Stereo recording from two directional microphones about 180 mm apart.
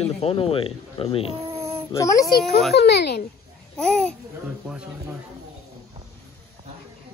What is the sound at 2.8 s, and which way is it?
Speech, 65° left (ahead or behind).